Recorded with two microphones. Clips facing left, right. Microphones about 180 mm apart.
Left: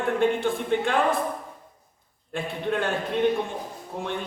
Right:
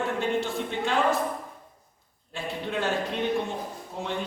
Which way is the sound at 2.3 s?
55° left (ahead or behind).